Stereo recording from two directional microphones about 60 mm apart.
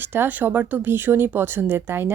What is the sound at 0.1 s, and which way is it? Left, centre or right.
Speech, right.